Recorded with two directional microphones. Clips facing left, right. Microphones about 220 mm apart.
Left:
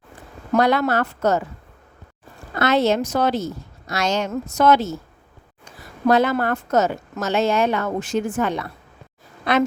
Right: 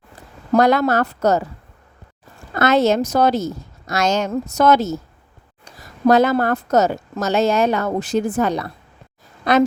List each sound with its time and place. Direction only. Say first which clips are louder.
0.5 s a woman's voice: right 3 dB; 40° right (ahead or behind)
2.6 s a woman's voice: right 3 dB; 45° right (ahead or behind)